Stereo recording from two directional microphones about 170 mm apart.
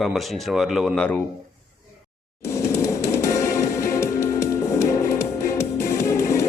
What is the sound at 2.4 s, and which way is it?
Music, 15° left (ahead or behind).